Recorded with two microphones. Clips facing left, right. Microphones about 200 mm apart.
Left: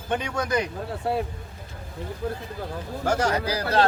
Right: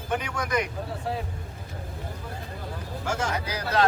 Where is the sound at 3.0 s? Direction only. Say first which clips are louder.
Left 6 dB; 40° left (ahead or behind).